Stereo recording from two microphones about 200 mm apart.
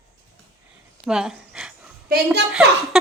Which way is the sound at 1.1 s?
5° right (ahead or behind).